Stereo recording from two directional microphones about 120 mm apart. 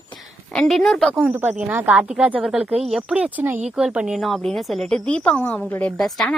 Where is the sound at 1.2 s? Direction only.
15° right (ahead or behind).